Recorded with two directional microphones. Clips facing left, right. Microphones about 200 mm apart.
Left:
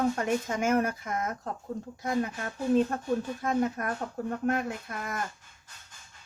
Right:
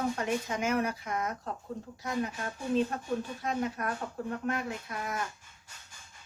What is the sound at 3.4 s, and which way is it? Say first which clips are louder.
Speech: left 4 dB; 50° left (ahead or behind).